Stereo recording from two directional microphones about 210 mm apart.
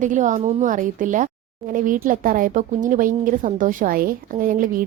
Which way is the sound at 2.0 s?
40° right (ahead or behind).